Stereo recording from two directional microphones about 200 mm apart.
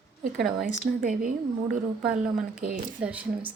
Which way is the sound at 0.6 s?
45° right (ahead or behind).